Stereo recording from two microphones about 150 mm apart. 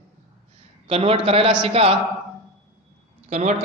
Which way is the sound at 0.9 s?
40° right (ahead or behind).